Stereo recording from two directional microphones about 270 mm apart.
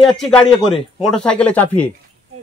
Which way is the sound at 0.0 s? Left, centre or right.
Centre.